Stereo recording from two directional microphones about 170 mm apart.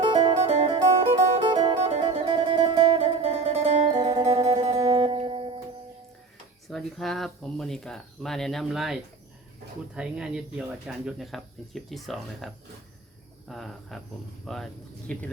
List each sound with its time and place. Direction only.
0.0 s music: 30° right (ahead or behind)
3.9 s music: 25° right (ahead or behind)
6.7 s speech: centre (ahead or behind)
13.5 s speech: centre (ahead or behind)